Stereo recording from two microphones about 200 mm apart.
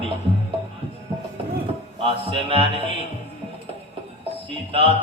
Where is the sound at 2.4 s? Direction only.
25° right (ahead or behind).